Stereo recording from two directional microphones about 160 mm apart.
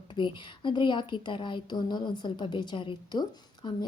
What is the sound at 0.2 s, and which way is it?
A woman's voice, 30° left (ahead or behind).